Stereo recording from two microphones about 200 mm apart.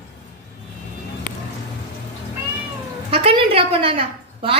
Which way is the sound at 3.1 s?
25° right (ahead or behind).